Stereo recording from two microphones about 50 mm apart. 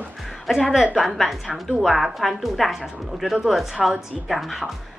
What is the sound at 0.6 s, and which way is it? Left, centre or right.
Speech, centre.